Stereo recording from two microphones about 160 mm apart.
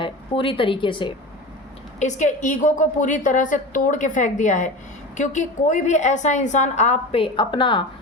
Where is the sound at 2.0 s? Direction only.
50° left (ahead or behind); by 7.9 s 30° left (ahead or behind).